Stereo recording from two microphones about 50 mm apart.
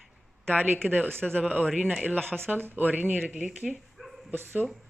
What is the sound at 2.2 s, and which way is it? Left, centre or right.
Speech, right.